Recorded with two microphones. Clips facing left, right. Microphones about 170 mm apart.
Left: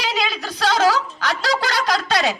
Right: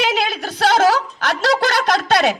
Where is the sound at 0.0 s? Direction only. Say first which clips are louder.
Right 4 dB; 55° right (ahead or behind).